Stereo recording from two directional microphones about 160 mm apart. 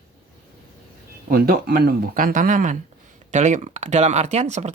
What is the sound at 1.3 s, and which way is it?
Speech, 65° right (ahead or behind).